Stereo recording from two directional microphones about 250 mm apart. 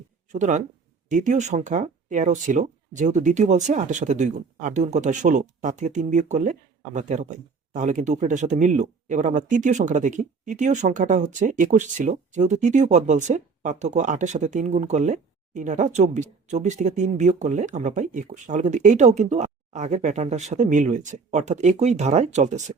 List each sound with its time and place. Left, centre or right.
0.3 s speech: right